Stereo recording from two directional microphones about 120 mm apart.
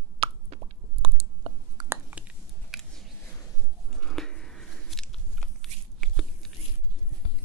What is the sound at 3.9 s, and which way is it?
Biting, centre (ahead or behind).